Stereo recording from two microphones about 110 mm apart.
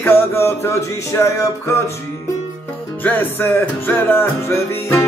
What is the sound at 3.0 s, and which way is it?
Music, 20° left (ahead or behind).